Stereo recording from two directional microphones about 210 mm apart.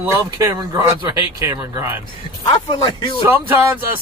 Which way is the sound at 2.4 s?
20° left (ahead or behind).